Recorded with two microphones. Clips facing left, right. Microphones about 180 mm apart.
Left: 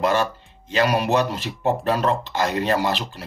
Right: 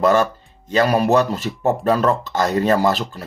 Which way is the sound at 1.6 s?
50° right (ahead or behind).